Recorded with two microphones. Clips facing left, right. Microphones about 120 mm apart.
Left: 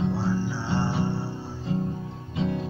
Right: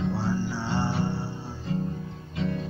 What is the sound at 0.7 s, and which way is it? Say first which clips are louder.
Music: left 2 dB; 5° left (ahead or behind).